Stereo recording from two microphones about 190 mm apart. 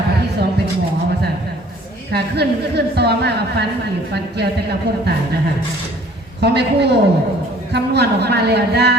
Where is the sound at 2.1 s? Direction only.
60° right (ahead or behind).